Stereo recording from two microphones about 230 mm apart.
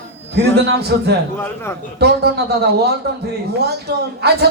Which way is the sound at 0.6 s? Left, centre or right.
Right.